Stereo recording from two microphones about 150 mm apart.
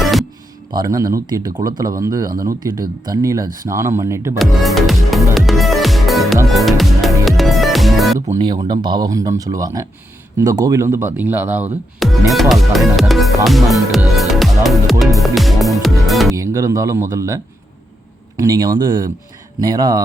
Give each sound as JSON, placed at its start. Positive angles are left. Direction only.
{"t": 0.0, "sound": "music", "side_deg": 0}
{"t": 0.8, "sound": "speech", "side_deg": -25}
{"t": 4.4, "sound": "music", "side_deg": 0}
{"t": 8.4, "sound": "speech", "side_deg": -30}
{"t": 12.3, "sound": "speech", "side_deg": 0}
{"t": 14.2, "sound": "music", "side_deg": 0}
{"t": 16.3, "sound": "speech", "side_deg": -20}